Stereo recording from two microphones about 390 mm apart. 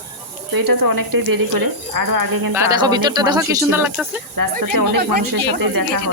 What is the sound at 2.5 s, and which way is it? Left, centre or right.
Speech, centre.